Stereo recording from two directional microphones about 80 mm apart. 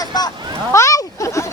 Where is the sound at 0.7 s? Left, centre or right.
Left.